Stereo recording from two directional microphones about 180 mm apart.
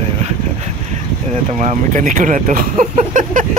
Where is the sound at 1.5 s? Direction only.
40° right (ahead or behind).